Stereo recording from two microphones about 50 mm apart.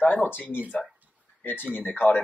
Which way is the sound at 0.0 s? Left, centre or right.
Left.